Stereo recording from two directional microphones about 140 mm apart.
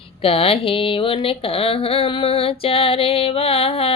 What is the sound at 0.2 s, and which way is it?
Speech, 40° left (ahead or behind).